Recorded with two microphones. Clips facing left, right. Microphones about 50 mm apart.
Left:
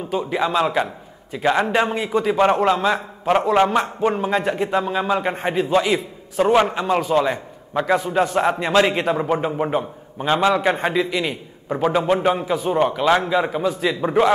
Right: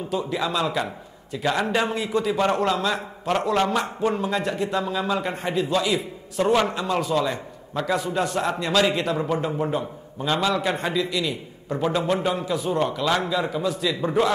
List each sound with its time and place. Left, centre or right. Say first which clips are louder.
0.1 s a man's voice: left 5 dB; left
8.4 s a man's voice: left 4 dB; left
11.7 s a man's voice: left 4 dB; centre